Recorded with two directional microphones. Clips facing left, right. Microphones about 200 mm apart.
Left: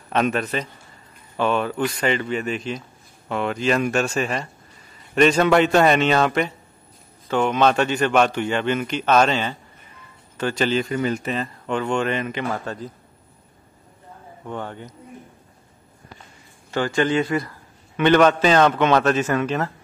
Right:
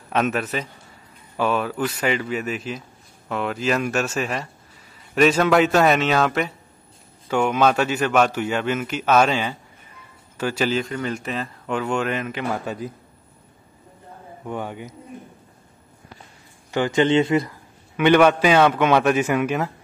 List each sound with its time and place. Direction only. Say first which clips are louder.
0.1 s a man's voice: left 1 dB; 5° right (ahead or behind)
10.8 s speech: left 3 dB; 5° left (ahead or behind)
14.4 s a man's voice: right 2 dB; 10° right (ahead or behind)
16.7 s speech: right 2 dB; 20° right (ahead or behind)
17.9 s a man's voice: even; 10° right (ahead or behind)